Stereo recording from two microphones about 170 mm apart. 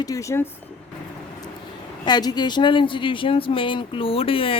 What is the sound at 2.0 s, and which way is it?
Speech, 25° left (ahead or behind).